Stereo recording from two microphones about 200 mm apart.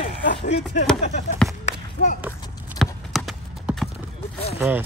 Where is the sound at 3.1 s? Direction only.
Centre (ahead or behind).